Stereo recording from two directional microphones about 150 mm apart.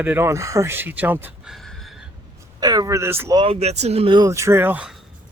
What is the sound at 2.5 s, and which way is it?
Speech, 25° right (ahead or behind).